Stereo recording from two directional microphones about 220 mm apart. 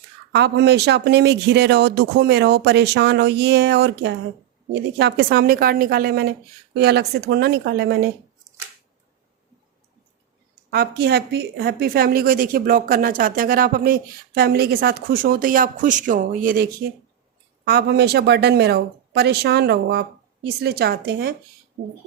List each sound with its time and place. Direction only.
0.3 s speech: 50° right (ahead or behind)
10.7 s a woman's voice: 45° right (ahead or behind)
17.7 s speech: 45° right (ahead or behind)